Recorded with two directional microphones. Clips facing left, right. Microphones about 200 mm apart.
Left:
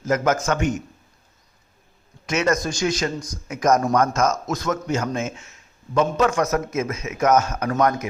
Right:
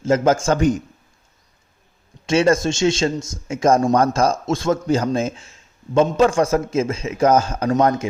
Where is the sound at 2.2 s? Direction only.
30° right (ahead or behind).